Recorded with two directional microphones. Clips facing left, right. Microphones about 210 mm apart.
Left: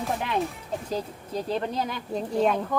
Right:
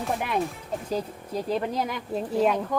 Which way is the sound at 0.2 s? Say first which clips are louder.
Even; 10° right (ahead or behind).